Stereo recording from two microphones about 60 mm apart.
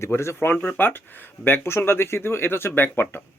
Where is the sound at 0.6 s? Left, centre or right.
Left.